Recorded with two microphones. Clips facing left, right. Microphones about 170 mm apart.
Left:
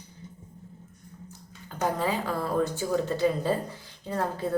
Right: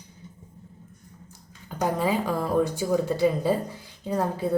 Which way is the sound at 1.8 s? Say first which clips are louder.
Right 3 dB; 15° right (ahead or behind).